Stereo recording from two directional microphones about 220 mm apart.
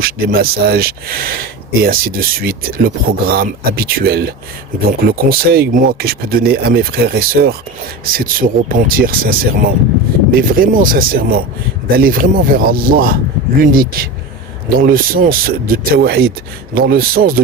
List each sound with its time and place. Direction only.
0.0 s speech: 40° right (ahead or behind)